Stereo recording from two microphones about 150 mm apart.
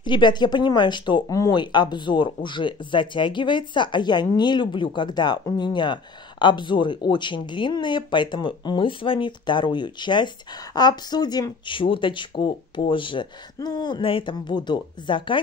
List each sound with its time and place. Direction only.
0.0 s speech: 30° left (ahead or behind)